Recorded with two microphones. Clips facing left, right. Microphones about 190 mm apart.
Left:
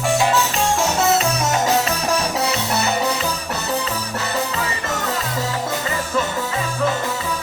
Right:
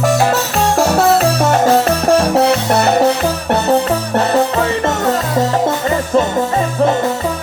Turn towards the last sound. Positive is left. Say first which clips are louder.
# right 9 dB
turn(degrees=-55)  # may be behind; listen again after turning